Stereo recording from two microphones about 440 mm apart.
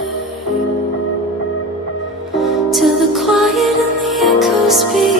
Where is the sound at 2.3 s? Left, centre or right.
Centre.